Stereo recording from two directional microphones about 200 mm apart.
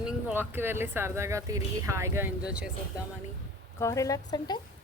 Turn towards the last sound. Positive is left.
turn(degrees=20)  # may be behind; listen again after turning